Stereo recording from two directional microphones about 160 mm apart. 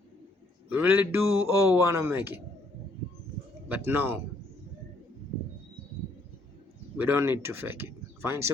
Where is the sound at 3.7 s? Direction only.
15° right (ahead or behind).